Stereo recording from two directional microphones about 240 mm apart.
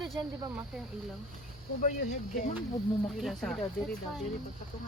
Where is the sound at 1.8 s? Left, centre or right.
Left.